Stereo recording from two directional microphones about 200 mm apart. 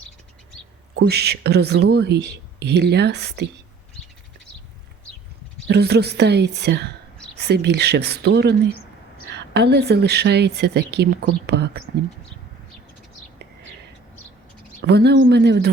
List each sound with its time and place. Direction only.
0.9 s speech: 55° right (ahead or behind)
5.6 s speech: 55° right (ahead or behind)
14.8 s speech: 55° right (ahead or behind)